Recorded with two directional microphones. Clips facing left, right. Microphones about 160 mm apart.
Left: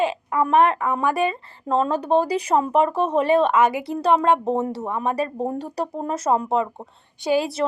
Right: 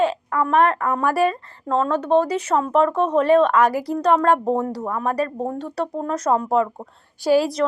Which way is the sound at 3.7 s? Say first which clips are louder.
Right 3 dB; 25° left (ahead or behind).